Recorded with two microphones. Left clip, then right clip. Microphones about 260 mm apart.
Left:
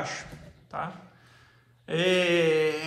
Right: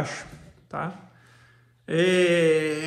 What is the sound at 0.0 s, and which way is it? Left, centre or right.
Speech, centre.